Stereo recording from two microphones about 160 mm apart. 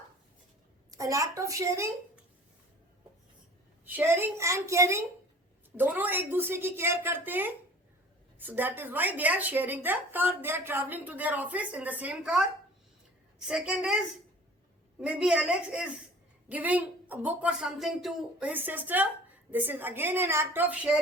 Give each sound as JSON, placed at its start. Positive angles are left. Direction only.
{"t": 0.9, "sound": "a woman's voice", "side_deg": -20}
{"t": 3.8, "sound": "a woman's voice", "side_deg": -15}